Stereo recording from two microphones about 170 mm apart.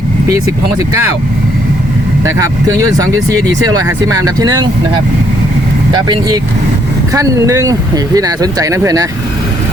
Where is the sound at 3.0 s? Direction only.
20° right (ahead or behind).